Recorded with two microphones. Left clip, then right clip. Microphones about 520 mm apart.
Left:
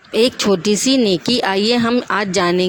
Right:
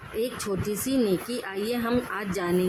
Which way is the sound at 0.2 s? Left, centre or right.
Centre.